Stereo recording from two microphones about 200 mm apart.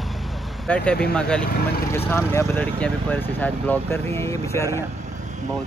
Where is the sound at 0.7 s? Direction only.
5° left (ahead or behind).